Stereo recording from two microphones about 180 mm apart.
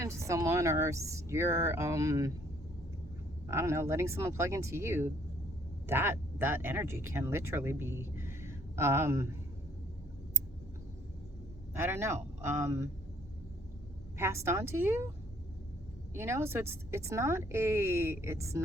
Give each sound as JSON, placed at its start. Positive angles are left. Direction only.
{"t": 0.0, "sound": "speech", "side_deg": -15}
{"t": 3.5, "sound": "speech", "side_deg": -15}
{"t": 11.8, "sound": "speech", "side_deg": -15}
{"t": 14.2, "sound": "speech", "side_deg": -15}
{"t": 16.1, "sound": "speech", "side_deg": -15}